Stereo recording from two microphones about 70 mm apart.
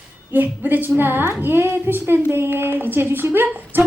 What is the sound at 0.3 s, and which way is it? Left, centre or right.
A woman's voice, right.